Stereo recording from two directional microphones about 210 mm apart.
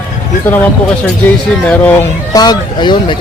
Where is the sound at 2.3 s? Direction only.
20° left (ahead or behind).